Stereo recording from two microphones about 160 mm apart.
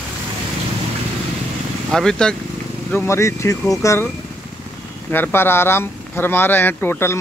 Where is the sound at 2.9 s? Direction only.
15° left (ahead or behind).